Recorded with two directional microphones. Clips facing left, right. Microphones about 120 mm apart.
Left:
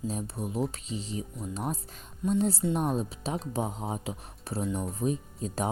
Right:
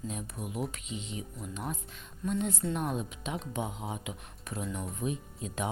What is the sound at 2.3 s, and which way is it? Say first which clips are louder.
Speech: left 5 dB; 35° left (ahead or behind).